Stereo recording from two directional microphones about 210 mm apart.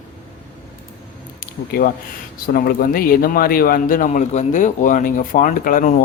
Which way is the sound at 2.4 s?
45° left (ahead or behind).